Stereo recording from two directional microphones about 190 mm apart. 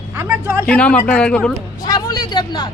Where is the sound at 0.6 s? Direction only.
5° left (ahead or behind).